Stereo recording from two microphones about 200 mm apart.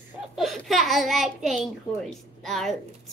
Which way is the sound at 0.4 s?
Centre (ahead or behind).